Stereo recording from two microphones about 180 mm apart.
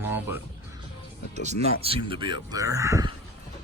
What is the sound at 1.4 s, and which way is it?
A man's voice, 35° right (ahead or behind).